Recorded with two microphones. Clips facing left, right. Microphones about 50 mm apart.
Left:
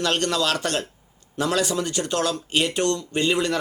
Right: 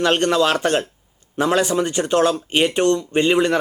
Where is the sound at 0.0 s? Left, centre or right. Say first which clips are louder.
Right 6 dB; right.